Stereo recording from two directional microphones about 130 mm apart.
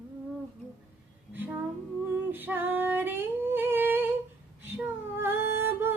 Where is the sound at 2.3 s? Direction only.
15° right (ahead or behind).